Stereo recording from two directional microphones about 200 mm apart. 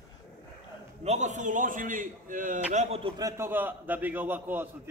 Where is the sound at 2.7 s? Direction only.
25° right (ahead or behind).